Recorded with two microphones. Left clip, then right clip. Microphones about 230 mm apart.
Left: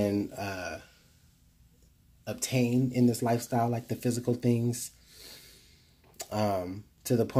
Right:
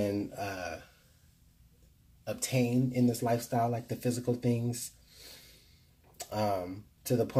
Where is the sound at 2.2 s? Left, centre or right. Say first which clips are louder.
Left 1 dB; left.